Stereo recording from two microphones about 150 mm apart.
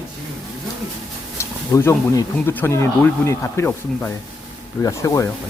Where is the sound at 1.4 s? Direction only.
20° left (ahead or behind).